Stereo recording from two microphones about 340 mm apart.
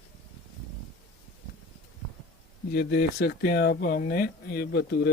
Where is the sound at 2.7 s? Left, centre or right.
Left.